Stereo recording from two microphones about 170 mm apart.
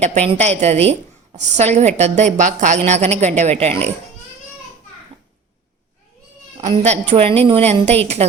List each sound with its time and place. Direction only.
0.0 s a woman's voice: 40° right (ahead or behind)
6.6 s a woman's voice: 40° right (ahead or behind)